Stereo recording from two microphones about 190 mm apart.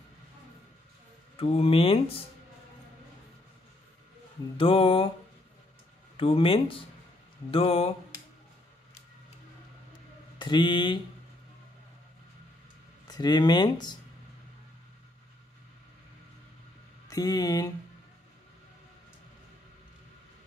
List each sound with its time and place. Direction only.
1.3 s speech: 30° left (ahead or behind)
4.6 s speech: 30° left (ahead or behind)
6.1 s speech: 30° left (ahead or behind)
7.5 s a sound: 30° left (ahead or behind)
10.4 s speech: 25° left (ahead or behind)
13.0 s speech: 20° left (ahead or behind)
17.1 s speech: 20° left (ahead or behind)